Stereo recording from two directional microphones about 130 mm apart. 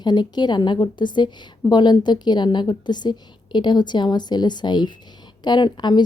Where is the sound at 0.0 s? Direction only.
35° left (ahead or behind).